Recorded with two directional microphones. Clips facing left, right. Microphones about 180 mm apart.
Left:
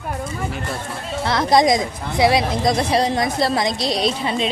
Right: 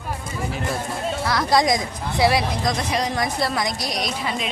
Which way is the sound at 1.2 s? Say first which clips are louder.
Left 4 dB; 25° left (ahead or behind).